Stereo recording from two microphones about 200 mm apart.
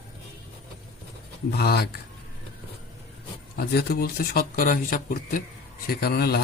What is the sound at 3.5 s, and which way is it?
A man's voice, 50° left (ahead or behind).